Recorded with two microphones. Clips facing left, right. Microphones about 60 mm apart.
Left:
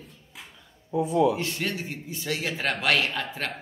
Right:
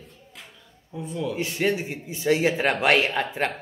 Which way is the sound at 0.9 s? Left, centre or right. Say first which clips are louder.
Left 8 dB; centre.